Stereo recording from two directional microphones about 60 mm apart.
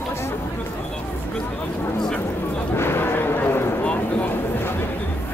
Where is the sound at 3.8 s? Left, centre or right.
Left.